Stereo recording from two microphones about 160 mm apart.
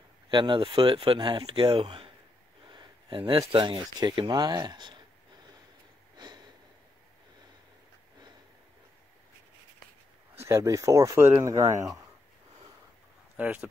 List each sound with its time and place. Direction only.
0.3 s speech: 30° right (ahead or behind)
6.1 s sniff: 25° right (ahead or behind)
10.3 s speech: 15° right (ahead or behind)
13.4 s speech: 10° right (ahead or behind)